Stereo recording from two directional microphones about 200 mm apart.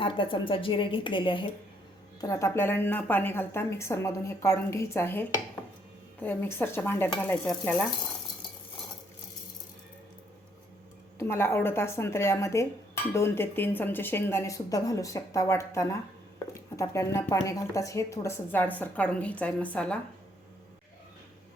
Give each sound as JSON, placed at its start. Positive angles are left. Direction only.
{"t": 0.0, "sound": "a woman's voice", "side_deg": 25}
{"t": 11.2, "sound": "a woman's voice", "side_deg": 10}